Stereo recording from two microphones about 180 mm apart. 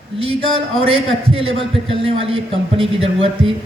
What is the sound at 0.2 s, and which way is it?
A man's voice, 35° right (ahead or behind).